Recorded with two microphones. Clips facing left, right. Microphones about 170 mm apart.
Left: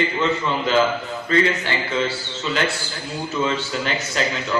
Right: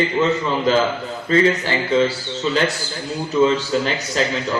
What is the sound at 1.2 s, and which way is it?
A man's voice, 35° right (ahead or behind).